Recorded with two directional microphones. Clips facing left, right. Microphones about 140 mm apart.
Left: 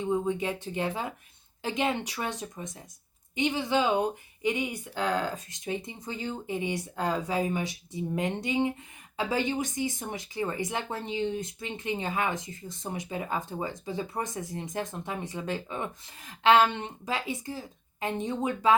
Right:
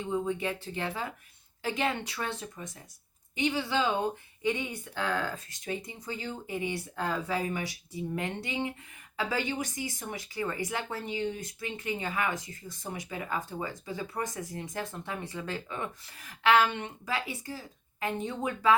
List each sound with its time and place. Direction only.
0.3 s speech: 20° left (ahead or behind)